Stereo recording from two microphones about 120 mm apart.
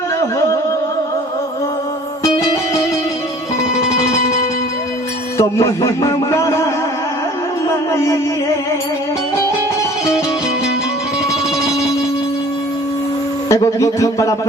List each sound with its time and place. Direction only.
0.2 s music: 25° left (ahead or behind)
5.4 s a man's voice: 25° left (ahead or behind)
7.7 s music: 25° left (ahead or behind)
13.5 s speech: 25° left (ahead or behind)